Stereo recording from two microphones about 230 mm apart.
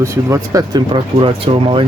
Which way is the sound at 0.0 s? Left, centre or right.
Centre.